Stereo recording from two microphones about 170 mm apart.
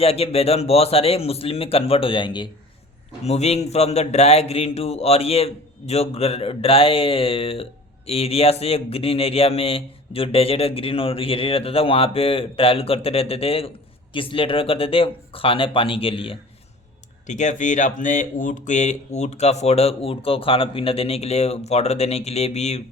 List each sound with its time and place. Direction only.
0.0 s speech: 35° left (ahead or behind)
3.2 s speech: 40° left (ahead or behind)
17.2 s speech: 45° left (ahead or behind)